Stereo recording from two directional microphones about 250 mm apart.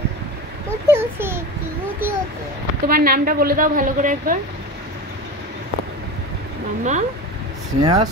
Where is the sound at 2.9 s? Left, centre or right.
Right.